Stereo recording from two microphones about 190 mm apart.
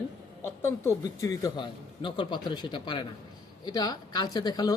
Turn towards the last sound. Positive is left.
turn(degrees=20)  # may be behind; listen again after turning